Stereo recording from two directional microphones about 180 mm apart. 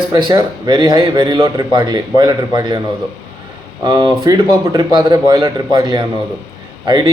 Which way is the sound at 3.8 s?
25° right (ahead or behind).